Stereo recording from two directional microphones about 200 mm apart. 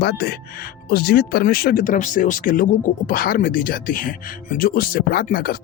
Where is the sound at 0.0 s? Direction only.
50° left (ahead or behind).